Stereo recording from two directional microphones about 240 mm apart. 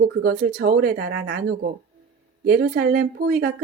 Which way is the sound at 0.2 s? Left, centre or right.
Right.